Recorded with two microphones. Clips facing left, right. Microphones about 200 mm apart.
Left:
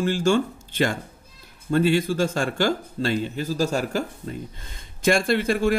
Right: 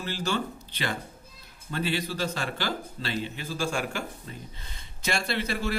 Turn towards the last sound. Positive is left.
turn(degrees=50)  # may be behind; listen again after turning